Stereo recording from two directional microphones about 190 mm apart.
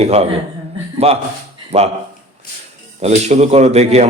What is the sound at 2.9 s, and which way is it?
A man's voice, 35° right (ahead or behind).